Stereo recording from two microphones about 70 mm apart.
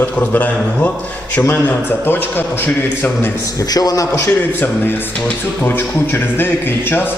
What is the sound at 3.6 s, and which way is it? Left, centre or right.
Speech, left.